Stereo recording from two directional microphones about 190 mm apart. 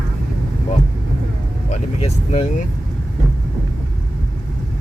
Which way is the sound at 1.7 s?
35° left (ahead or behind).